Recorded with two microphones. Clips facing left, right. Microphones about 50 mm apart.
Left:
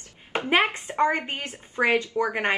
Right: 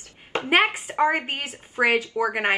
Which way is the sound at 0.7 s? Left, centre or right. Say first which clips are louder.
Right 1 dB; centre.